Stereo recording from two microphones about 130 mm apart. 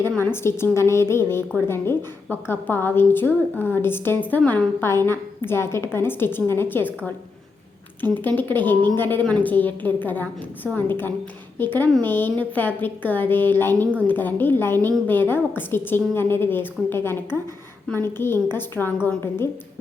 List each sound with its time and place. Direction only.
0.2 s a woman's voice: 20° left (ahead or behind)
8.4 s a woman's voice: 15° left (ahead or behind)